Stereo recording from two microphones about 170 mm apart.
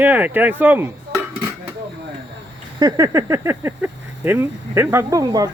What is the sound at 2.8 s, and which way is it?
Speech, 25° right (ahead or behind).